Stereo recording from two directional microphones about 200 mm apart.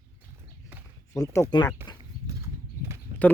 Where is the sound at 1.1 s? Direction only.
15° left (ahead or behind).